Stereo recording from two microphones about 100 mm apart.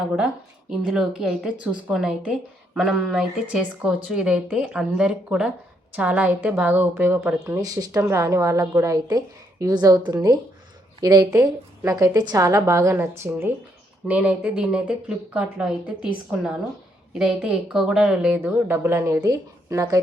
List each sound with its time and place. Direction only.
0.9 s a woman's voice: 5° right (ahead or behind); by 7.3 s 20° right (ahead or behind)
7.4 s a woman's voice: 30° right (ahead or behind)
14.1 s a woman's voice: 10° right (ahead or behind)
18.3 s a woman's voice: 20° right (ahead or behind)